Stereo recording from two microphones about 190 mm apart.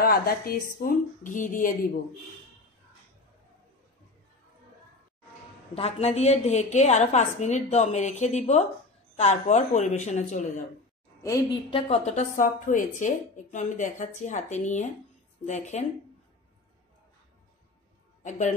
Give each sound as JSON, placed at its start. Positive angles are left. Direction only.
{"t": 0.0, "sound": "speech", "side_deg": 50}
{"t": 5.8, "sound": "a woman's voice", "side_deg": 35}
{"t": 11.7, "sound": "a woman's voice", "side_deg": 35}